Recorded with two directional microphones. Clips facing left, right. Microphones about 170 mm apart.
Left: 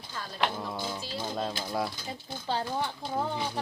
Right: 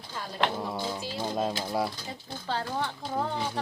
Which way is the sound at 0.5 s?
5° right (ahead or behind).